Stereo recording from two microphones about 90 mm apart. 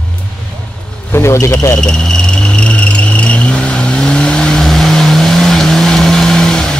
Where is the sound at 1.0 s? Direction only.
30° left (ahead or behind).